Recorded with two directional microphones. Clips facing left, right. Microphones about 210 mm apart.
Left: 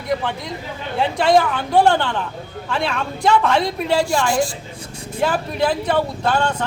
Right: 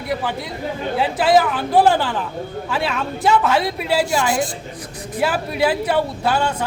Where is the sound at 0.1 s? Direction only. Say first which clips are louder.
Left 2 dB; 5° right (ahead or behind).